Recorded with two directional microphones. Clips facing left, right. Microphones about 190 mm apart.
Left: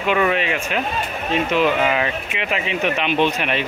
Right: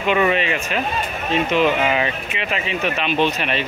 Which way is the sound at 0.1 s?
Centre (ahead or behind).